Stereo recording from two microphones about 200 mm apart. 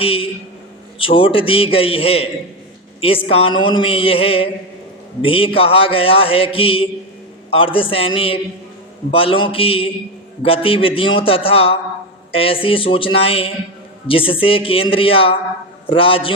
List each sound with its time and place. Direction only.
0.0 s mantra: 30° left (ahead or behind)